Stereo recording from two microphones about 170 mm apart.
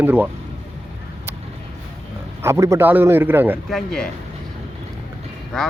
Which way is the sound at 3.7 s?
5° left (ahead or behind).